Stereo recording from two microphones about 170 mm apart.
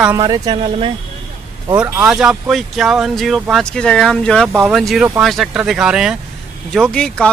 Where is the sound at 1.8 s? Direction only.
10° right (ahead or behind).